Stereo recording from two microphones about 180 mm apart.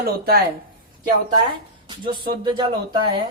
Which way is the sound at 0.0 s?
55° right (ahead or behind).